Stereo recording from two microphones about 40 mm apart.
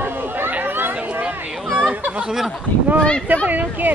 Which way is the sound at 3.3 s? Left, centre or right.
Right.